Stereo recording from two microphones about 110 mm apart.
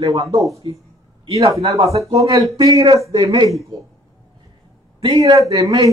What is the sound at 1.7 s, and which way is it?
A man's voice, 30° right (ahead or behind).